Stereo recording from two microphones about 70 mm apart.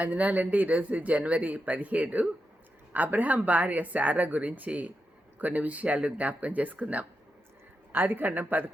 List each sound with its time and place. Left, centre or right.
0.0 s speech: right